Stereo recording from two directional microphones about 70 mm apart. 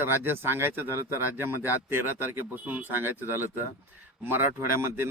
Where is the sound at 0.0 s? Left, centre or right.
Right.